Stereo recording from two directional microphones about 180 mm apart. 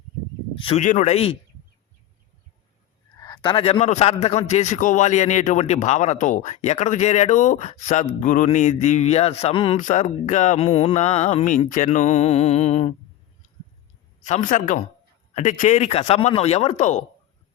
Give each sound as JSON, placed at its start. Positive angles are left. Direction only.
{"t": 0.6, "sound": "a man's voice", "side_deg": 35}
{"t": 3.2, "sound": "a man's voice", "side_deg": 20}
{"t": 9.8, "sound": "a man's voice", "side_deg": 40}
{"t": 14.3, "sound": "a man's voice", "side_deg": 45}